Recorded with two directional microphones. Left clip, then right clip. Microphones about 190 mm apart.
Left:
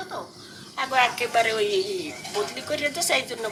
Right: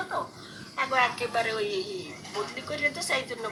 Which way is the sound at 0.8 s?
25° left (ahead or behind).